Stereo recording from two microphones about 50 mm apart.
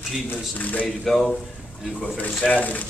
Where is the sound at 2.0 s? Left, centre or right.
Left.